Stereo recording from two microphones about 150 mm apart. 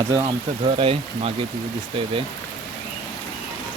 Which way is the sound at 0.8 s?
40° right (ahead or behind).